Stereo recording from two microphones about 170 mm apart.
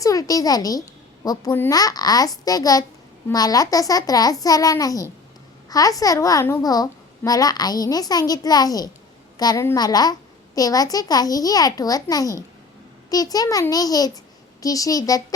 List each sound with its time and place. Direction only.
0.0 s a child's voice: 20° left (ahead or behind)